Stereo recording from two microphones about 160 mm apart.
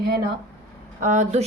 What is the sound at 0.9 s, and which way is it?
Speech, 50° right (ahead or behind).